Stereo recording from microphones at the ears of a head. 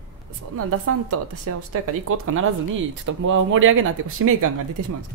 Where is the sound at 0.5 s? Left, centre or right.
Right.